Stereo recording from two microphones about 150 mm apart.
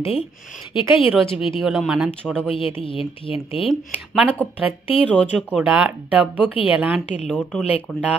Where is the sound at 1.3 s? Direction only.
35° left (ahead or behind).